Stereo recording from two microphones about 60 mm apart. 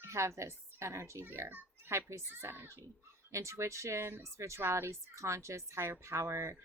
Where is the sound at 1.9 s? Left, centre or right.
Right.